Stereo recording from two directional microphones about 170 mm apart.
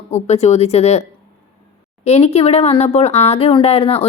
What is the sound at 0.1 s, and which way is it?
Speech, 40° left (ahead or behind).